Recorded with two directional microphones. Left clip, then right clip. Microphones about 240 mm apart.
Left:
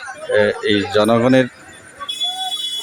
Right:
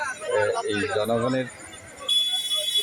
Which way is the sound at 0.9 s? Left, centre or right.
Left.